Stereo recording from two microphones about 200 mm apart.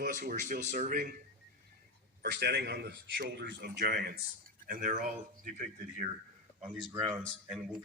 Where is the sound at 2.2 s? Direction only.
55° right (ahead or behind).